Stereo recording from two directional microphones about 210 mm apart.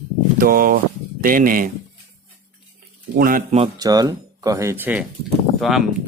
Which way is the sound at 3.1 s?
40° right (ahead or behind).